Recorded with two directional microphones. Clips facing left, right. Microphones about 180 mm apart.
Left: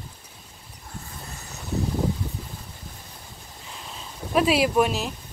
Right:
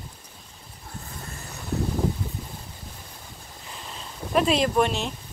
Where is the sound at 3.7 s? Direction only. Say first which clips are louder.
Even; centre (ahead or behind).